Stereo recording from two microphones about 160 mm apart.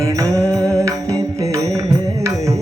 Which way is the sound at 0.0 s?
20° right (ahead or behind).